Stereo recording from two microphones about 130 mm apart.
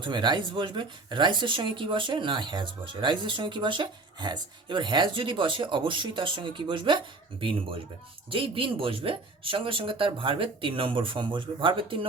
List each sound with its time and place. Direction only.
0.0 s speech: 35° right (ahead or behind)